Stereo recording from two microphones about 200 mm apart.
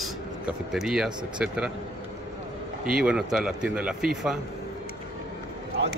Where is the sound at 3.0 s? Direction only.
5° right (ahead or behind).